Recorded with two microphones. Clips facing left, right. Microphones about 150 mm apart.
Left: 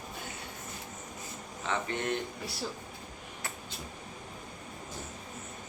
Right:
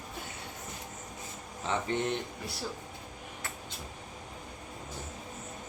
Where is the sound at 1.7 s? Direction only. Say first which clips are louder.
Right 1 dB; 20° right (ahead or behind).